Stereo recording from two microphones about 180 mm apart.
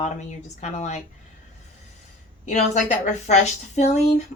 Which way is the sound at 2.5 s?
40° left (ahead or behind).